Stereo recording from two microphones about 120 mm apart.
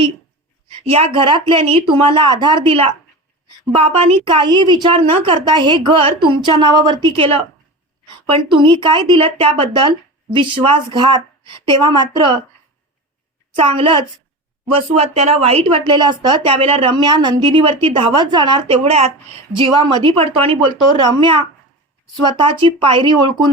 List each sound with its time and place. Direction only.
0.9 s a woman's voice: 55° right (ahead or behind)
13.6 s a woman's voice: 50° right (ahead or behind)
18.9 s speech: 60° right (ahead or behind)
19.5 s a woman's voice: 45° right (ahead or behind)